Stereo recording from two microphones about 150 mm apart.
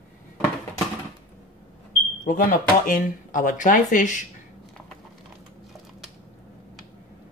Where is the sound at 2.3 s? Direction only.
65° left (ahead or behind).